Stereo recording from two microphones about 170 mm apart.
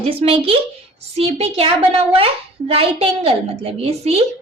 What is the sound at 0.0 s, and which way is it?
A woman's voice, 35° right (ahead or behind).